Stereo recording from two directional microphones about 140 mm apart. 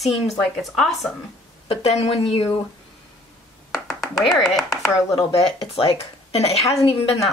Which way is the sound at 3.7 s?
Centre (ahead or behind).